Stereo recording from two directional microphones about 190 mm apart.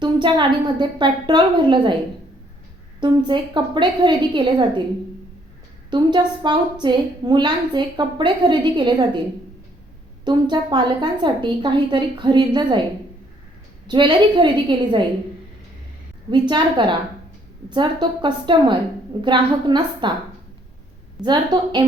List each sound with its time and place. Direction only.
0.0 s a woman's voice: 25° right (ahead or behind)
3.0 s a woman's voice: 25° right (ahead or behind)
5.9 s a woman's voice: 25° right (ahead or behind)
10.2 s a woman's voice: 25° right (ahead or behind)
13.8 s a woman's voice: 25° right (ahead or behind)
16.3 s a woman's voice: 25° right (ahead or behind)
21.2 s a woman's voice: 25° right (ahead or behind)